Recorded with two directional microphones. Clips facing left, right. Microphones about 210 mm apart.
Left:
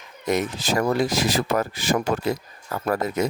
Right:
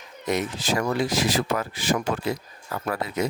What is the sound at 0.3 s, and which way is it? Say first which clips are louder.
Speech: left 2 dB; 45° left (ahead or behind).